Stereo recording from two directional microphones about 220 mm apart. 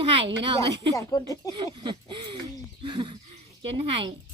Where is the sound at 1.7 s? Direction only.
20° right (ahead or behind).